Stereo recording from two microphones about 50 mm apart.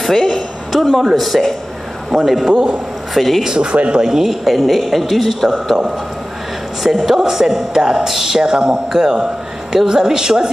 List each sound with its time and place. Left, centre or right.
0.0 s a man's voice: centre
3.4 s speech: centre
4.0 s a man's voice: centre
6.8 s speech: centre